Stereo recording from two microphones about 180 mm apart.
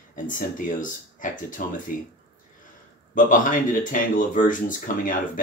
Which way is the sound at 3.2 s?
45° left (ahead or behind).